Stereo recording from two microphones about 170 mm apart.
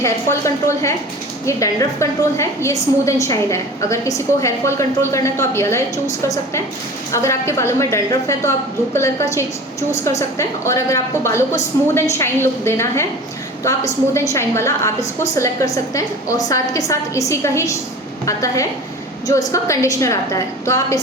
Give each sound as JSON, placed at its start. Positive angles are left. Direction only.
{"t": 0.0, "sound": "a woman's voice", "side_deg": 15}
{"t": 14.1, "sound": "a woman's voice", "side_deg": 15}